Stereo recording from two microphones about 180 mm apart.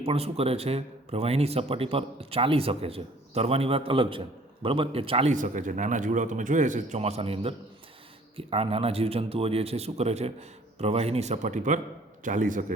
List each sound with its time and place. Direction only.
0.0 s a man's voice: 35° right (ahead or behind)